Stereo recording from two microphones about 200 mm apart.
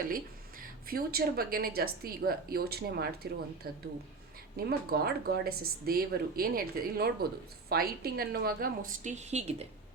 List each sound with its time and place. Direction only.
0.9 s speech: 50° right (ahead or behind); by 9.6 s 35° right (ahead or behind)